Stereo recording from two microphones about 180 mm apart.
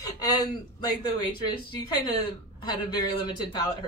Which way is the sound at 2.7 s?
25° left (ahead or behind).